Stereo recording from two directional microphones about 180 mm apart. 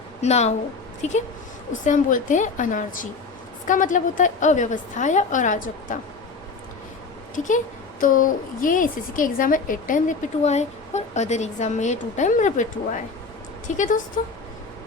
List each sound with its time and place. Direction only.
0.2 s a woman's voice: 35° left (ahead or behind)
7.3 s a woman's voice: 45° left (ahead or behind)